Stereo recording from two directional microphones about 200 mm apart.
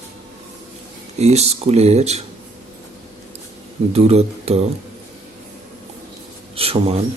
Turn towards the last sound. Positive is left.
turn(degrees=-30)  # may be behind; listen again after turning